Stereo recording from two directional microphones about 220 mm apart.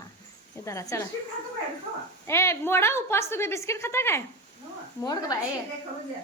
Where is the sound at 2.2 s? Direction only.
10° left (ahead or behind).